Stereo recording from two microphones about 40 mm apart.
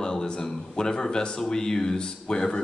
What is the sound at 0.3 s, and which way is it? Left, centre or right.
A man's voice, centre.